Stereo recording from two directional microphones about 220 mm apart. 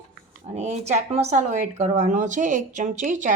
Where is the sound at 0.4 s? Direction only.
30° right (ahead or behind).